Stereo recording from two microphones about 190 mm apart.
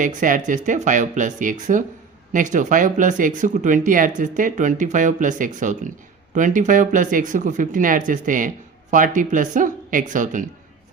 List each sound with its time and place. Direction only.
0.0 s speech: 45° right (ahead or behind)